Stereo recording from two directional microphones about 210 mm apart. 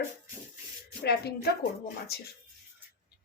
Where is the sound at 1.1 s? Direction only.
50° left (ahead or behind).